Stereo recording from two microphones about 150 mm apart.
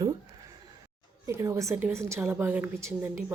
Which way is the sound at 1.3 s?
15° right (ahead or behind).